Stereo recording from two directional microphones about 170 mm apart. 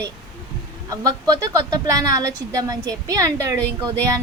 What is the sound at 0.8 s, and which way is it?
Speech, 20° right (ahead or behind).